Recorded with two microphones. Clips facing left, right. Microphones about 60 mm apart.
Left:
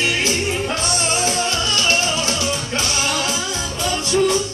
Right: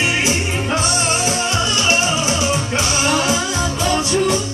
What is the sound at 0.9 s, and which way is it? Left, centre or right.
Music, centre.